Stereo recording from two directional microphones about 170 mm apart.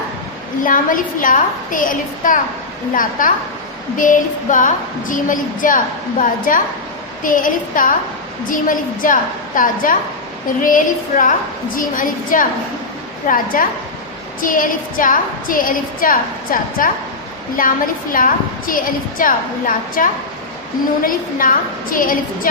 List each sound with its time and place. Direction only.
0.7 s a woman's voice: 50° left (ahead or behind)